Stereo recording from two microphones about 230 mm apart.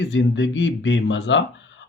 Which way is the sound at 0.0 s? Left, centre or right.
Left.